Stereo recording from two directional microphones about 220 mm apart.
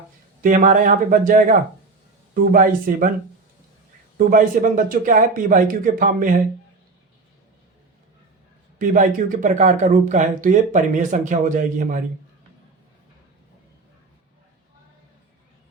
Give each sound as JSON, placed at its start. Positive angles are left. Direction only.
{"t": 0.4, "sound": "speech", "side_deg": -35}
{"t": 4.2, "sound": "speech", "side_deg": -40}
{"t": 8.8, "sound": "speech", "side_deg": -35}